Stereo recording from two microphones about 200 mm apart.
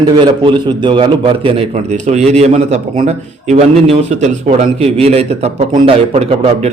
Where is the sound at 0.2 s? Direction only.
25° right (ahead or behind).